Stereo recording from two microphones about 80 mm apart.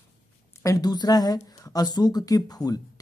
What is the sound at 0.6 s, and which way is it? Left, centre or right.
Speech, left.